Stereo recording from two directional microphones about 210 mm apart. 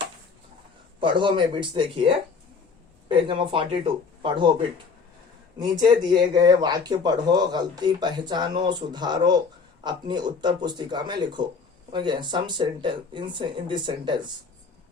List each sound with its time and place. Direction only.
0.9 s speech: 25° right (ahead or behind)
5.5 s speech: 20° right (ahead or behind)